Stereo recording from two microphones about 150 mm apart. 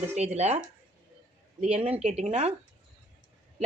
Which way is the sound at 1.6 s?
45° right (ahead or behind).